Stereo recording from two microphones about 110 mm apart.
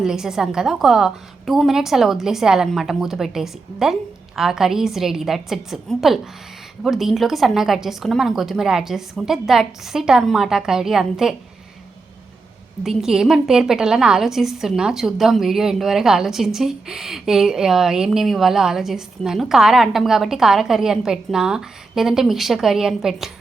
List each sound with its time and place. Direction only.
0.0 s a woman's voice: 5° right (ahead or behind)
12.8 s a woman's voice: 5° right (ahead or behind)